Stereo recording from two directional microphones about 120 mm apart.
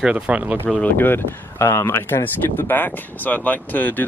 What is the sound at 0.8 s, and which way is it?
Speech, 15° left (ahead or behind).